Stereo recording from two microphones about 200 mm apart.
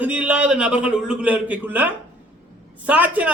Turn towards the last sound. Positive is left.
turn(degrees=-5)  # may be behind; listen again after turning